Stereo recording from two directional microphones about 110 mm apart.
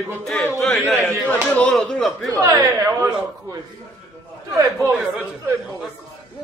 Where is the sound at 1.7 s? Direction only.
Centre (ahead or behind).